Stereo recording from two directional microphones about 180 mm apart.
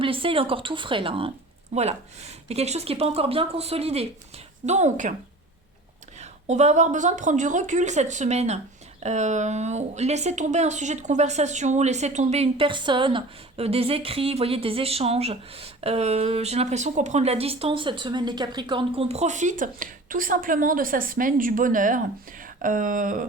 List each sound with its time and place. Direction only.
0.0 s speech: 30° right (ahead or behind)
6.1 s speech: 40° right (ahead or behind)